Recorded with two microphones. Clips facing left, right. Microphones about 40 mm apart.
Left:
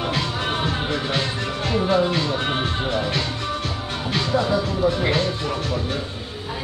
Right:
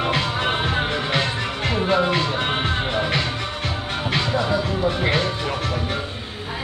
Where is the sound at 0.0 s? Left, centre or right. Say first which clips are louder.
Right 3 dB; right.